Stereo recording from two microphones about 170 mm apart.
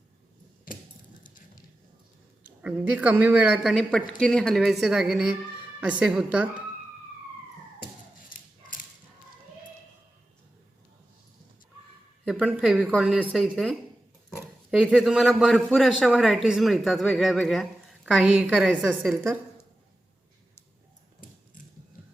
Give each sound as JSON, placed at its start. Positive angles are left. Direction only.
{"t": 1.2, "sound": "a sound", "side_deg": 50}
{"t": 2.4, "sound": "a man's voice", "side_deg": -10}
{"t": 12.2, "sound": "a man's voice", "side_deg": -5}
{"t": 18.5, "sound": "a man's voice", "side_deg": 5}